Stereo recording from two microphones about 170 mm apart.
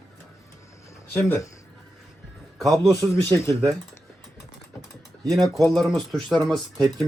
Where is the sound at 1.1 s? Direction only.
10° left (ahead or behind).